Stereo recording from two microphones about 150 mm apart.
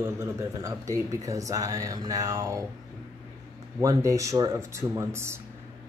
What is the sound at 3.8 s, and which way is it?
A man's voice, 20° right (ahead or behind).